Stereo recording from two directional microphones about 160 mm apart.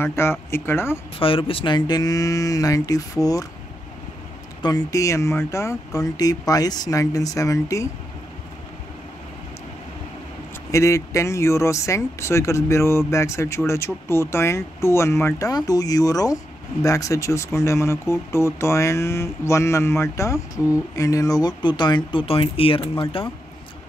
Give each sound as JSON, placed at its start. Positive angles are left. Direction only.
{"t": 0.0, "sound": "speech", "side_deg": 15}
{"t": 1.2, "sound": "speech", "side_deg": 35}
{"t": 4.6, "sound": "speech", "side_deg": 25}
{"t": 10.7, "sound": "speech", "side_deg": 20}